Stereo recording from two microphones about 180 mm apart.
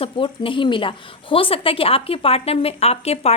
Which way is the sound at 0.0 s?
30° left (ahead or behind).